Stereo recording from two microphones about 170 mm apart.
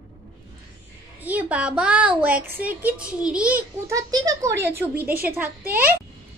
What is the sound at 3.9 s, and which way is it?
A child's voice, 20° right (ahead or behind).